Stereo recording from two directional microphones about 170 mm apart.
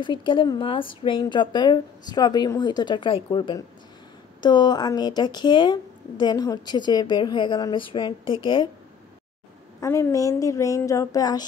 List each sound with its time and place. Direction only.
0.0 s speech: 30° left (ahead or behind)
9.8 s speech: 15° left (ahead or behind)